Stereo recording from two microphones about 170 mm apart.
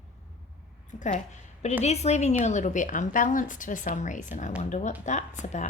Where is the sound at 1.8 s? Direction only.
40° left (ahead or behind).